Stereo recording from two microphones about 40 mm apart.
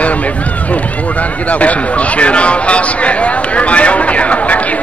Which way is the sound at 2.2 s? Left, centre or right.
Left.